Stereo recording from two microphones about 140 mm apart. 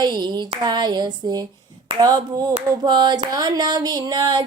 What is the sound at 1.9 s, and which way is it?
Speech, 25° right (ahead or behind).